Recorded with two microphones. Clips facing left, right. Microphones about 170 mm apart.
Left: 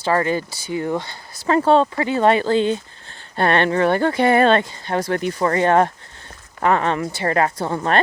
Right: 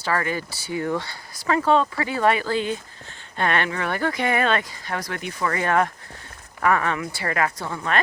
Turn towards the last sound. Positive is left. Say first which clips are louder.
# left 6 dB
turn(degrees=35)  # may be behind; listen again after turning